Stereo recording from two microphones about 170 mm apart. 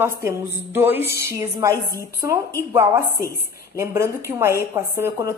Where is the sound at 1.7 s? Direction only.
15° left (ahead or behind).